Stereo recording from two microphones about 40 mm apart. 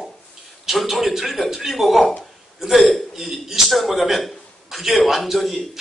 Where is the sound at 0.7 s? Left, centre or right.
Centre.